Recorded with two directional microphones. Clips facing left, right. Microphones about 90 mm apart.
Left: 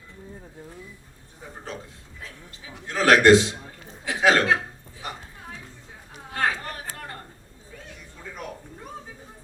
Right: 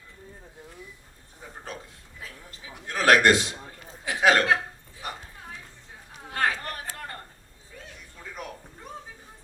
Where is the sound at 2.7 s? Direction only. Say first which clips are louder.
Left 2 dB; 25° left (ahead or behind).